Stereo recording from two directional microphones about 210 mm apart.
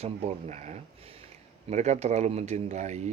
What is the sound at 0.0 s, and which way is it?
Speech, 30° right (ahead or behind).